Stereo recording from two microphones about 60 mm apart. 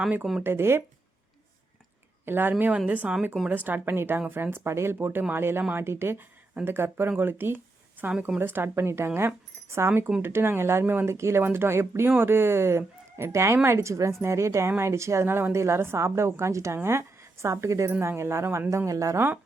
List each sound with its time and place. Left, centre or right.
0.4 s speech: right
2.2 s a woman's voice: right
11.1 s a woman's voice: right
18.9 s a woman's voice: right